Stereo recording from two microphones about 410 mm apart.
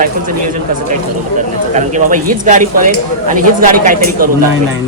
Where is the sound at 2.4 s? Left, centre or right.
Centre.